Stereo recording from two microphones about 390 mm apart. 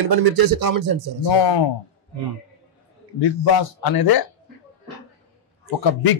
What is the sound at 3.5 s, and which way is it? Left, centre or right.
Speech, left.